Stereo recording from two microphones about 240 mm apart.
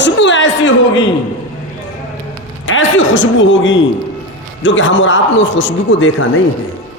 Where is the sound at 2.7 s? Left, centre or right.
Left.